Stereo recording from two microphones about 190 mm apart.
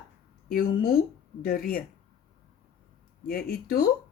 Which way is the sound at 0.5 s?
50° left (ahead or behind).